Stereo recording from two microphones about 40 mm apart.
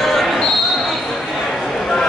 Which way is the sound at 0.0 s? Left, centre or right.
Centre.